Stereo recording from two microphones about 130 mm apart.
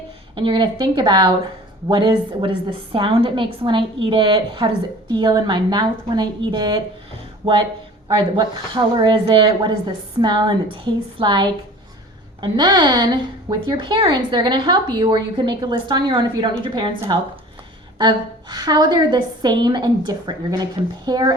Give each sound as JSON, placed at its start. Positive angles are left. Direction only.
{"t": 0.3, "sound": "a woman's voice", "side_deg": -40}
{"t": 17.9, "sound": "a woman's voice", "side_deg": -35}